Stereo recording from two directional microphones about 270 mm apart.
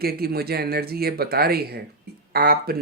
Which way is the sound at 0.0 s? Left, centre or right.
Right.